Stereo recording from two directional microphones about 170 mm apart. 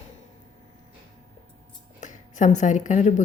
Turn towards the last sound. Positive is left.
turn(degrees=45)  # may be behind; listen again after turning